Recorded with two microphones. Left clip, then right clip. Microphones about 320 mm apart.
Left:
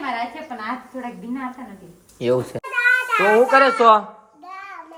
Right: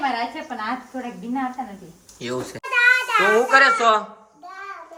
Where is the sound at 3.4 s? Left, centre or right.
Centre.